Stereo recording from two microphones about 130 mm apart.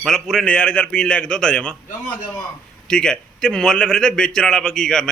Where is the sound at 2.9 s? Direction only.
5° left (ahead or behind).